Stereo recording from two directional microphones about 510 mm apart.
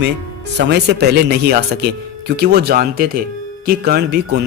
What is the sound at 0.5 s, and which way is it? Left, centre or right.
Speech, centre.